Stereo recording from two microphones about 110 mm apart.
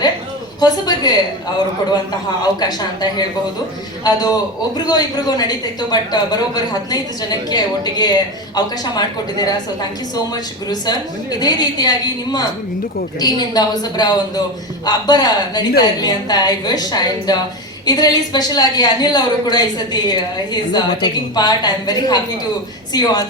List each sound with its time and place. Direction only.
0.6 s speech: 40° left (ahead or behind)
2.6 s speech: 40° left (ahead or behind)
10.7 s speech: 40° left (ahead or behind)